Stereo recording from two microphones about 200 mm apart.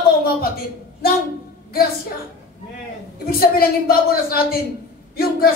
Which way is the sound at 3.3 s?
50° left (ahead or behind).